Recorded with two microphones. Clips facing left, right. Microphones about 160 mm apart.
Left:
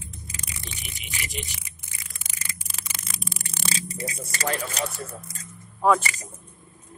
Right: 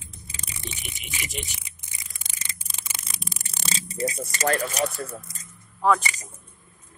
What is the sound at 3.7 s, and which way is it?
Speech, 25° right (ahead or behind).